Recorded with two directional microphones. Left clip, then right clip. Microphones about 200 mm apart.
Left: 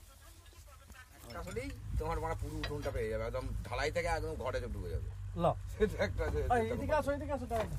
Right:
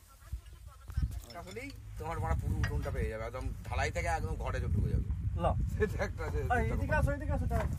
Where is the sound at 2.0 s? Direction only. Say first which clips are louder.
Left 1 dB; 30° right (ahead or behind).